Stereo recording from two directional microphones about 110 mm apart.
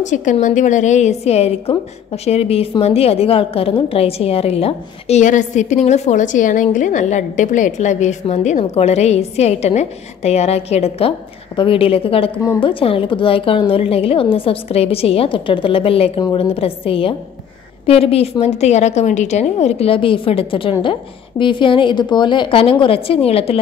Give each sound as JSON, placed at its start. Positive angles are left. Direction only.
{"t": 0.0, "sound": "a woman's voice", "side_deg": 90}
{"t": 7.4, "sound": "a woman's voice", "side_deg": 90}
{"t": 18.6, "sound": "a woman's voice", "side_deg": 90}